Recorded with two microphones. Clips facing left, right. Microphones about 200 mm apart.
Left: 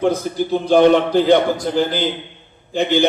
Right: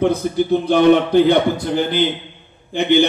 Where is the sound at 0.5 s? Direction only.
60° right (ahead or behind).